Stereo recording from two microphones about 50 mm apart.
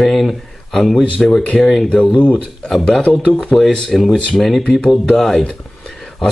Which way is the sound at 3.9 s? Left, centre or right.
Centre.